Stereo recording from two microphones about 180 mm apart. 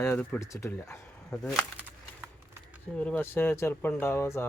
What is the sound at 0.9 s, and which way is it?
Speech, 5° left (ahead or behind).